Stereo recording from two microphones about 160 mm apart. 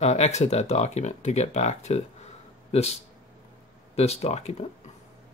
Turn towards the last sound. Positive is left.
turn(degrees=40)  # may be behind; listen again after turning